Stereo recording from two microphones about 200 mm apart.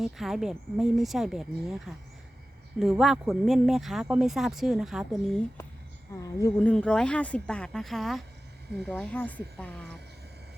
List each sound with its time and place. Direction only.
0.0 s speech: centre (ahead or behind)
2.7 s speech: centre (ahead or behind)
6.1 s speech: 15° left (ahead or behind)